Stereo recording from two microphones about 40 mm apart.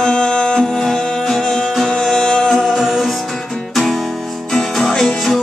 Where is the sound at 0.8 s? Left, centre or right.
Centre.